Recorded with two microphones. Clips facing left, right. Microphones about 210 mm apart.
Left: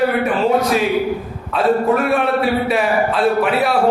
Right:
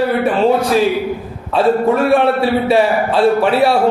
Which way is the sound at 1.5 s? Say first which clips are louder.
Right 2 dB; 30° right (ahead or behind).